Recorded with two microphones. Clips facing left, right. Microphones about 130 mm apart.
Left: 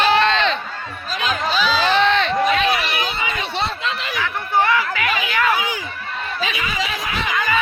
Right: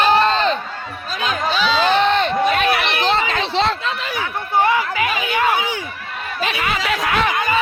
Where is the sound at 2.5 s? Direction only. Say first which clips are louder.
Right 1 dB; 55° right (ahead or behind).